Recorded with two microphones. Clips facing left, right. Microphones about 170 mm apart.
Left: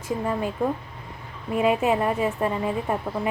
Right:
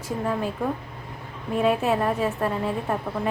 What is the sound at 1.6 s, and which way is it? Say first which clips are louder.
Speech: left 1 dB; 5° left (ahead or behind).